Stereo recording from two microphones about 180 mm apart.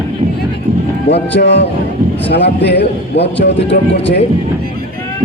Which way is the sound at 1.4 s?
70° left (ahead or behind).